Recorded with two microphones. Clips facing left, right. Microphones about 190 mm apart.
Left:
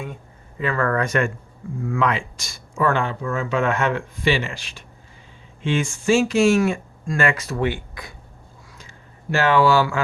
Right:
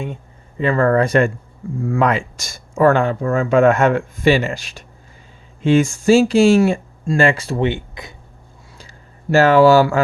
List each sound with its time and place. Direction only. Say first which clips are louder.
0.6 s speech: right 7 dB; 30° right (ahead or behind)
9.3 s speech: right 7 dB; 40° right (ahead or behind)